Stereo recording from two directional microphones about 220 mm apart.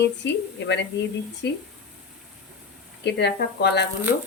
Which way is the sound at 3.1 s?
50° left (ahead or behind).